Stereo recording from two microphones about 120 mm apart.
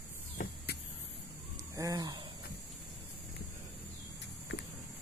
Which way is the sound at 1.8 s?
30° right (ahead or behind).